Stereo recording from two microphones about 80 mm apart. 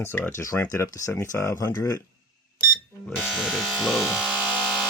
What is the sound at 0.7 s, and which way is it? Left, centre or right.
Speech, left.